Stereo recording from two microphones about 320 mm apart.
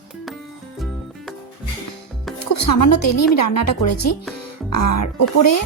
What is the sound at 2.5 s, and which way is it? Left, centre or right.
Speech, left.